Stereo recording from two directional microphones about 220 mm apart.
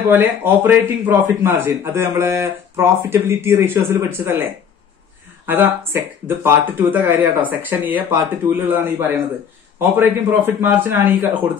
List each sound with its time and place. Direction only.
0.1 s a man's voice: 10° right (ahead or behind)
5.5 s a man's voice: 10° right (ahead or behind)